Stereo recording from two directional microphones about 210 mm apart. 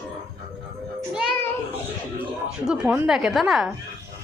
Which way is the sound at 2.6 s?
5° right (ahead or behind).